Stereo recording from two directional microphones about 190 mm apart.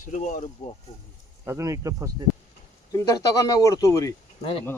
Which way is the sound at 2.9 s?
20° left (ahead or behind).